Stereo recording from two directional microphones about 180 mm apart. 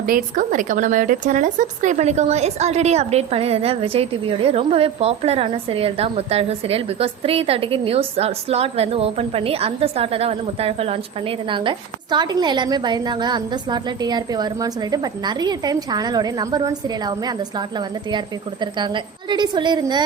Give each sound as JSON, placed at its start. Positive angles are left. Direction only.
{"t": 0.0, "sound": "speech", "side_deg": -50}
{"t": 18.6, "sound": "a woman's voice", "side_deg": -25}